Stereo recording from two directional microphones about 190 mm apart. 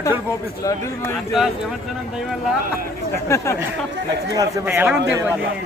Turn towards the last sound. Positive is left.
turn(degrees=-10)  # may be behind; listen again after turning